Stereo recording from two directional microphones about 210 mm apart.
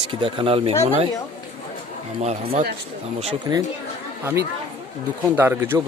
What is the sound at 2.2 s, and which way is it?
A man's voice, 30° right (ahead or behind).